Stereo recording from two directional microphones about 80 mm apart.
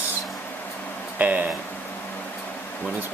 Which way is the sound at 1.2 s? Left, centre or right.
Centre.